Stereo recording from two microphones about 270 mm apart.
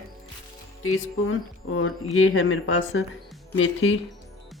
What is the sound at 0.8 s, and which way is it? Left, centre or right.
Speech, left.